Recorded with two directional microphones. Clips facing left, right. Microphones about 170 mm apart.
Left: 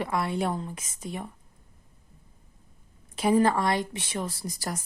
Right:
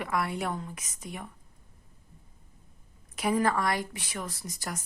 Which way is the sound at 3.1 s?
30° left (ahead or behind).